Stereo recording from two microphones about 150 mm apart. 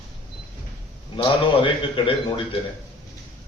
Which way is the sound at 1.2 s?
35° left (ahead or behind).